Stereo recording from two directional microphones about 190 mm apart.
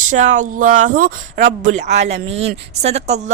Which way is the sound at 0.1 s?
40° right (ahead or behind).